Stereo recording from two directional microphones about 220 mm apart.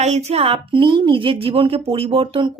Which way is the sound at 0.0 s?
30° right (ahead or behind).